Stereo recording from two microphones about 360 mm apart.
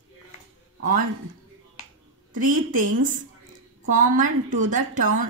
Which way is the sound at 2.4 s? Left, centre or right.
Right.